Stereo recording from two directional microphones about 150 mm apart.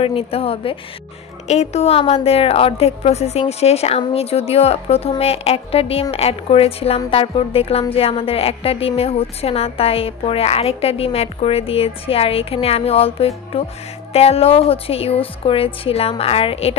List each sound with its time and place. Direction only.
0.0 s a woman's voice: 40° left (ahead or behind)